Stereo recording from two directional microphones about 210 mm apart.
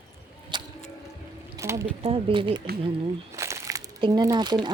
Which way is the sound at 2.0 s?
25° right (ahead or behind).